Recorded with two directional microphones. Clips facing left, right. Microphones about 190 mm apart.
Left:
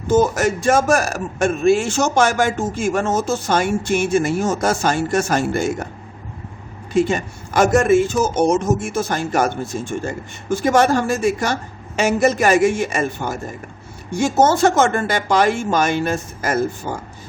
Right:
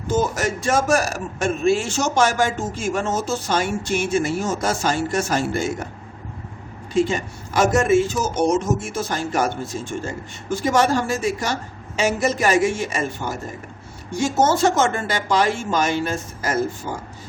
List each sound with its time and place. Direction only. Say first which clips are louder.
0.1 s speech: left 5 dB; 55° left (ahead or behind)
6.9 s speech: left 2 dB; 55° left (ahead or behind)